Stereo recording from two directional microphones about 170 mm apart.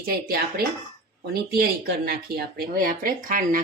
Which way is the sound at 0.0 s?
60° right (ahead or behind).